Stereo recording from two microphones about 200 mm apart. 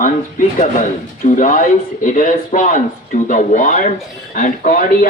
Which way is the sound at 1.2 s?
40° left (ahead or behind).